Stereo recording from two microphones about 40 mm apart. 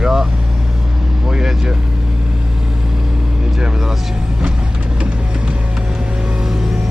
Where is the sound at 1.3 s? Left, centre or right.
Centre.